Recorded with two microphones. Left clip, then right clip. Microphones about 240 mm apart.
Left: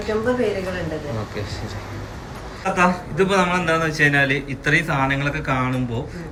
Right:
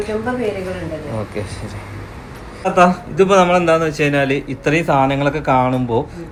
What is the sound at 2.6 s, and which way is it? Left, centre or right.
A man's voice, centre.